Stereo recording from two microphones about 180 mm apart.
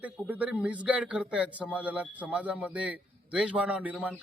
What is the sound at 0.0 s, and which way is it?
Speech, 10° right (ahead or behind).